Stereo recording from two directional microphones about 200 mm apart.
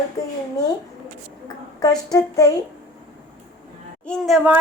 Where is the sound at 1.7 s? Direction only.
20° left (ahead or behind).